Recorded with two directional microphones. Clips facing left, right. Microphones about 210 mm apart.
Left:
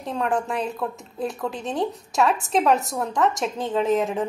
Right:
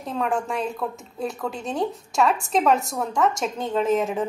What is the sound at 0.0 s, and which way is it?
A woman's voice, centre (ahead or behind).